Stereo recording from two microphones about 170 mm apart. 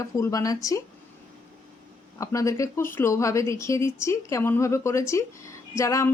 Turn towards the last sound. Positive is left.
turn(degrees=15)  # may be behind; listen again after turning